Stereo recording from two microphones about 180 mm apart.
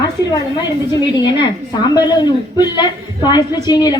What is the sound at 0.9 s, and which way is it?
A woman's voice, 20° left (ahead or behind).